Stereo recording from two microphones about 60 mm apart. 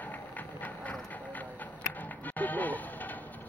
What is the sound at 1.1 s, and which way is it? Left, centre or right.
Music, left.